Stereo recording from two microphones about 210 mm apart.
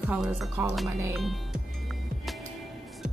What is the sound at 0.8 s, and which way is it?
Speech, 15° right (ahead or behind).